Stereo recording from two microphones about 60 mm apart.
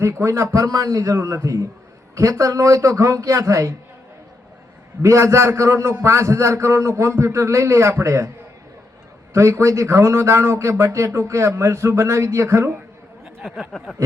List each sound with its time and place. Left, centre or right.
0.0 s a man's voice: right
5.0 s a man's voice: right
9.3 s a man's voice: right
13.2 s speech: centre